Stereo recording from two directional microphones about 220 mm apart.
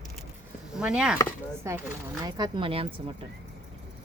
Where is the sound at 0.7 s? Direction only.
5° right (ahead or behind); by 3.0 s 25° right (ahead or behind).